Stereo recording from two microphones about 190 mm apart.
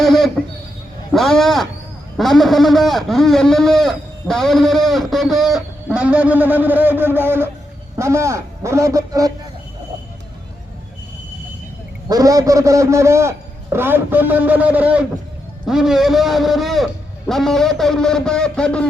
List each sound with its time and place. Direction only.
0.0 s a sound: centre (ahead or behind)
1.1 s a man's voice: centre (ahead or behind); by 9.3 s 15° right (ahead or behind)
12.0 s a man's voice: 20° right (ahead or behind); by 18.9 s 5° left (ahead or behind)